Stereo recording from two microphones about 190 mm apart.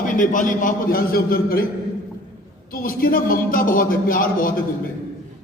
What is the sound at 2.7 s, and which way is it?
A man's voice, 50° left (ahead or behind).